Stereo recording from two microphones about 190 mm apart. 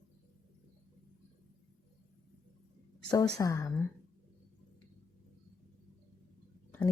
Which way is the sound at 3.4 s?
15° left (ahead or behind).